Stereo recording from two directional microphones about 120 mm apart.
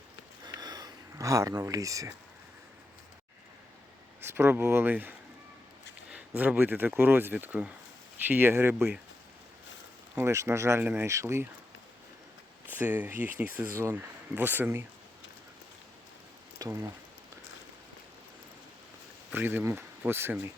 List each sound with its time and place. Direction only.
0.4 s a sound: 35° right (ahead or behind)
4.3 s speech: 20° right (ahead or behind)
10.2 s speech: 25° right (ahead or behind)
12.6 s speech: 15° right (ahead or behind)
16.6 s speech: 25° right (ahead or behind)
19.3 s speech: 15° right (ahead or behind)